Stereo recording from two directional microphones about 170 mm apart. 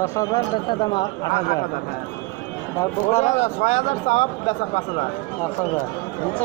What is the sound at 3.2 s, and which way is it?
Speech, 40° left (ahead or behind).